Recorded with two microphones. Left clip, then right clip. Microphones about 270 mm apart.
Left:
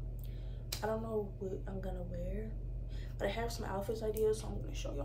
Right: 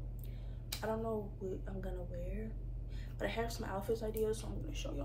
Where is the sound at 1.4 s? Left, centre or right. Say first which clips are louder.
Left 2 dB; centre.